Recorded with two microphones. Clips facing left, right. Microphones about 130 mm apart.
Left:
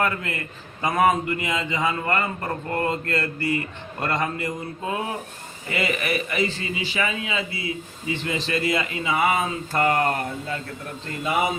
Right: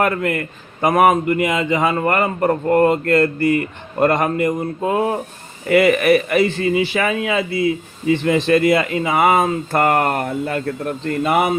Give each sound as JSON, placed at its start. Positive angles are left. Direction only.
{"t": 0.0, "sound": "a man's voice", "side_deg": -60}
{"t": 5.7, "sound": "a man's voice", "side_deg": -65}